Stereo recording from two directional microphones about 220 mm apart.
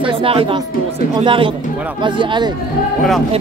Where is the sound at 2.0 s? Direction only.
20° right (ahead or behind).